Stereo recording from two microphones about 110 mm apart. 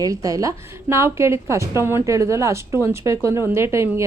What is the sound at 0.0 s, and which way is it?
A woman's voice, 30° right (ahead or behind).